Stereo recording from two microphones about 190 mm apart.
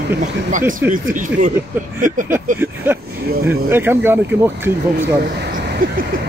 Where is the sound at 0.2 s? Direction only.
45° right (ahead or behind).